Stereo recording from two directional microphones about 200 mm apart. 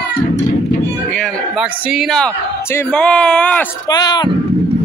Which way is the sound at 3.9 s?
20° left (ahead or behind).